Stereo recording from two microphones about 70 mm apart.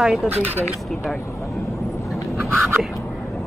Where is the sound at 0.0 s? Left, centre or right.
Centre.